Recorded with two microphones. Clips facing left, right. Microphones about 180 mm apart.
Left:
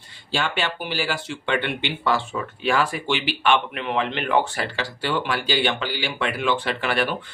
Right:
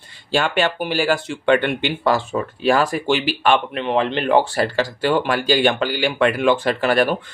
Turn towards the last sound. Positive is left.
turn(degrees=-40)  # may be behind; listen again after turning